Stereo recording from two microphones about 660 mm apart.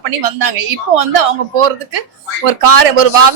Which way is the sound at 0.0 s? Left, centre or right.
Right.